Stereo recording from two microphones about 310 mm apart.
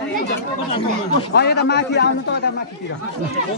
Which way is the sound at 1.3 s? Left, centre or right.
Left.